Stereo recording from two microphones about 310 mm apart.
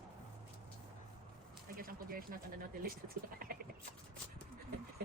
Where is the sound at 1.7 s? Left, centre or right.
Right.